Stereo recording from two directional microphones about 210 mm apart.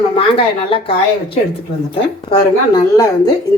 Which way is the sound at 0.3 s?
25° left (ahead or behind).